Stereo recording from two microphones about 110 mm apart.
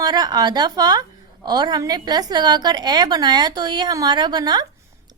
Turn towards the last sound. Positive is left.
turn(degrees=-40)  # may be behind; listen again after turning